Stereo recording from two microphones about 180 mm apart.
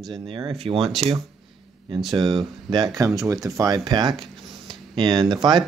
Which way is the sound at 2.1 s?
25° right (ahead or behind).